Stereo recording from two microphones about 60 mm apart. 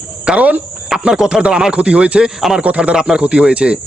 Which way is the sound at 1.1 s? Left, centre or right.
Centre.